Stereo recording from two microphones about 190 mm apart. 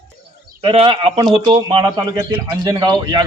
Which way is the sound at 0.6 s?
25° right (ahead or behind).